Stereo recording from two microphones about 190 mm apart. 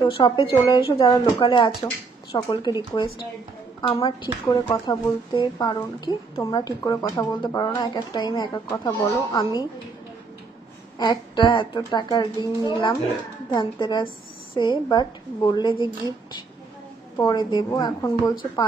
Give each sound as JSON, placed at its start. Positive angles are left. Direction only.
{"t": 0.0, "sound": "a woman's voice", "side_deg": 25}
{"t": 11.0, "sound": "a woman's voice", "side_deg": 25}